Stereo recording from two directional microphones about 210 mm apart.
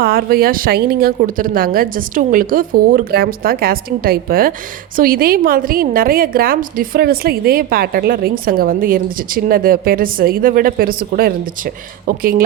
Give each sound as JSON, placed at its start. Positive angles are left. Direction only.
{"t": 0.0, "sound": "a woman's voice", "side_deg": -45}